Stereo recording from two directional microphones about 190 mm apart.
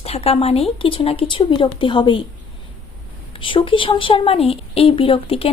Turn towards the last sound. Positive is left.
turn(degrees=30)  # may be behind; listen again after turning